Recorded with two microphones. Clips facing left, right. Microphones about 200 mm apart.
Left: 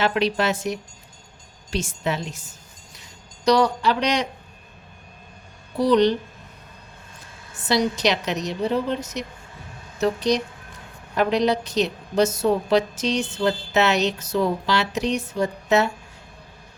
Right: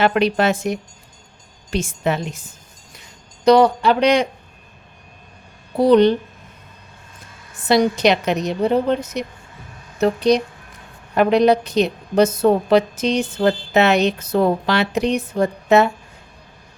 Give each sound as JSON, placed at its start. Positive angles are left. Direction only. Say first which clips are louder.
{"t": 0.0, "sound": "speech", "louder": "right 5 dB", "side_deg": -55}
{"t": 3.4, "sound": "speech", "louder": "right 6 dB", "side_deg": -55}
{"t": 5.7, "sound": "speech", "louder": "right 5 dB", "side_deg": -55}
{"t": 7.7, "sound": "speech", "louder": "right 6 dB", "side_deg": -55}